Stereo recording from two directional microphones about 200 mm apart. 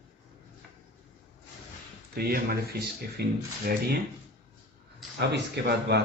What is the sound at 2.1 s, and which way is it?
Speech, 50° right (ahead or behind).